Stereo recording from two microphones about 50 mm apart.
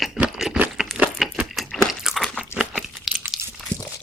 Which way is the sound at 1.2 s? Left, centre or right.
Centre.